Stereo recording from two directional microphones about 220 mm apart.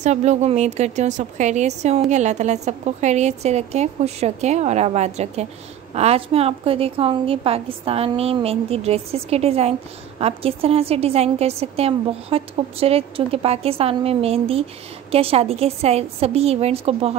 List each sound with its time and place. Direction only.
0.0 s a woman's voice: 30° right (ahead or behind)